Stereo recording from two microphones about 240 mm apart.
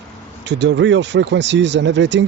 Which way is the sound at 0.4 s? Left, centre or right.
Right.